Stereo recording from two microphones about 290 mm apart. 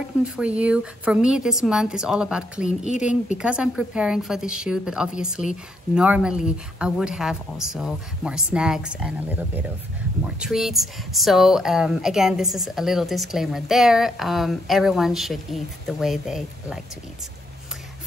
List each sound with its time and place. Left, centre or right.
0.2 s speech: centre
10.2 s speech: centre